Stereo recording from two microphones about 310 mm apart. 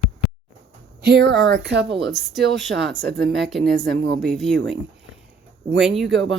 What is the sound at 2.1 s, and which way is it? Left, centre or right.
Speech, centre.